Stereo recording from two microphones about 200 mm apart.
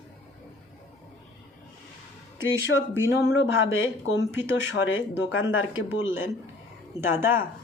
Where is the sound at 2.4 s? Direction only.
70° left (ahead or behind).